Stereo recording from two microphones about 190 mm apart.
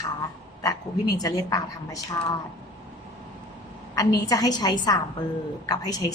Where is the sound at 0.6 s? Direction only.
20° left (ahead or behind).